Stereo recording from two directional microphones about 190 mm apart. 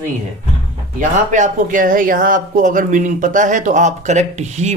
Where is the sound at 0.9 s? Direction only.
40° right (ahead or behind).